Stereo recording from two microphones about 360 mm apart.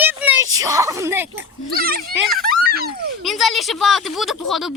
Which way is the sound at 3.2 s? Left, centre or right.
Centre.